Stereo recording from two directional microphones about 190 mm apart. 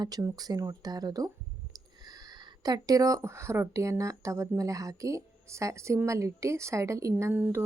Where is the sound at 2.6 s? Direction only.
20° right (ahead or behind).